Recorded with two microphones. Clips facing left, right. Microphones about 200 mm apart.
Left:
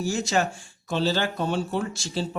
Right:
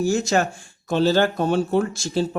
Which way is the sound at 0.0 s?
45° right (ahead or behind).